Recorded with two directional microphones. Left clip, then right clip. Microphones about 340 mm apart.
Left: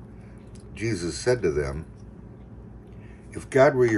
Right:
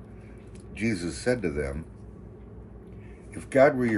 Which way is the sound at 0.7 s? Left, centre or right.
Left.